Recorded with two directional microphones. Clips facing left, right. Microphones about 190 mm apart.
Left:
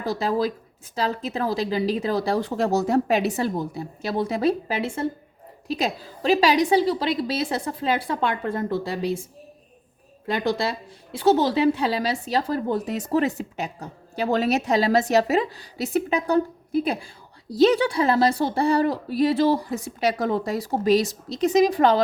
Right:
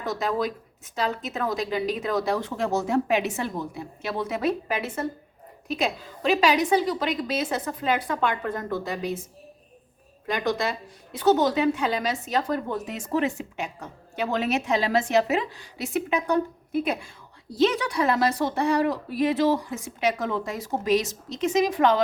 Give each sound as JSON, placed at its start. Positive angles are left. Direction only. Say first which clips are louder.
{"t": 0.0, "sound": "speech", "louder": "left 3 dB", "side_deg": 30}
{"t": 10.2, "sound": "speech", "louder": "left 2 dB", "side_deg": 30}